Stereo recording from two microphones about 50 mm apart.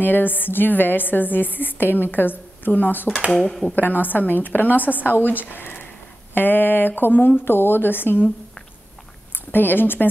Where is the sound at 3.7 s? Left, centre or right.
Left.